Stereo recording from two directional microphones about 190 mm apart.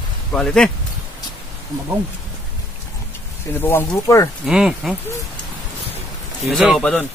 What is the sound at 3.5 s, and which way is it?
Speech, 10° left (ahead or behind).